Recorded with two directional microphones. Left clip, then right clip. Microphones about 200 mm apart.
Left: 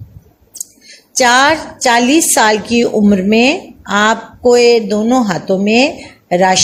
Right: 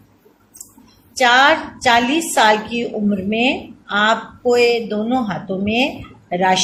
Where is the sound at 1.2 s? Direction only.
50° left (ahead or behind).